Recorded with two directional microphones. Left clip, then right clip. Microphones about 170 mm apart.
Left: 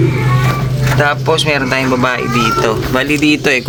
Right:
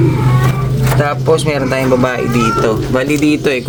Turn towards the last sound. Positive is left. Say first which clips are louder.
# left 1 dB
turn(degrees=0)  # may be behind; listen again after turning